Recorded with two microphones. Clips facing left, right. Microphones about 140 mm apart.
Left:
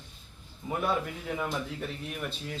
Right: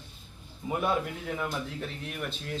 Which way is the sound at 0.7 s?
5° right (ahead or behind).